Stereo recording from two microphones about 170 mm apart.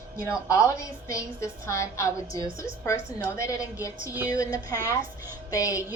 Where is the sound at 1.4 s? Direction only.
15° left (ahead or behind).